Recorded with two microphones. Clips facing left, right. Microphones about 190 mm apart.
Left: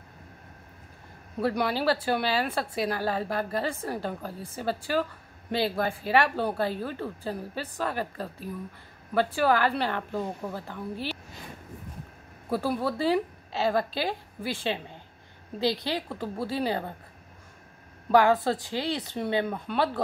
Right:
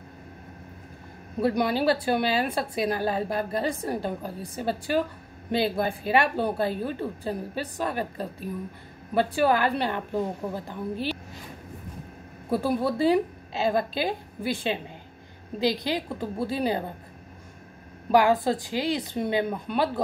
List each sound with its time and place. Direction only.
1.4 s a woman's voice: 20° right (ahead or behind)
12.4 s a woman's voice: 15° right (ahead or behind)
18.1 s a woman's voice: 15° right (ahead or behind)